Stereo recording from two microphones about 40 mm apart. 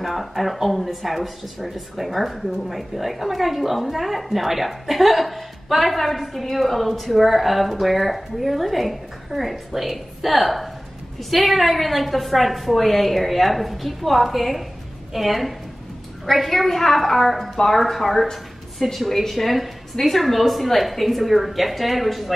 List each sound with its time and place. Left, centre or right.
0.0 s speech: centre